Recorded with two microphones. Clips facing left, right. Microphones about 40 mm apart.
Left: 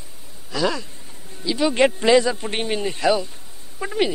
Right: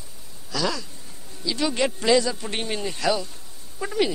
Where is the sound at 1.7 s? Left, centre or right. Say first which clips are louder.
Left 5 dB; left.